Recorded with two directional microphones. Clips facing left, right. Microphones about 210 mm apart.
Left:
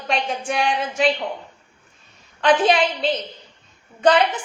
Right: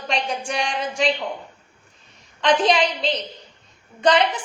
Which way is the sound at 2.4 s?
5° left (ahead or behind).